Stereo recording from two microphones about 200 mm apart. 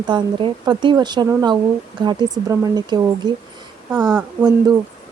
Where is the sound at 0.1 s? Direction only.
25° right (ahead or behind).